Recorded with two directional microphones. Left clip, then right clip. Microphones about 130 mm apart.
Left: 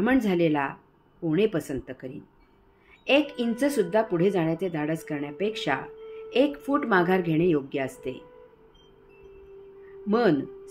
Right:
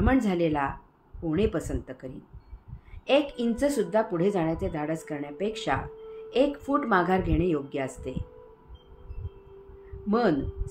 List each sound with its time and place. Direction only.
0.0 s a woman's voice: 70° left (ahead or behind)
10.0 s a woman's voice: 75° left (ahead or behind)